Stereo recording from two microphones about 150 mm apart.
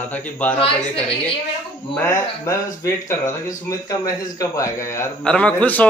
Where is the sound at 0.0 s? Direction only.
10° left (ahead or behind).